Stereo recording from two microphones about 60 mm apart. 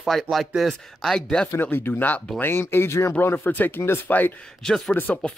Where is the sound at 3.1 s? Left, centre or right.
Left.